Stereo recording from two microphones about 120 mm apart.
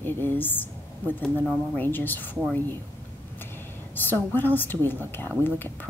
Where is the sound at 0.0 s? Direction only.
15° left (ahead or behind).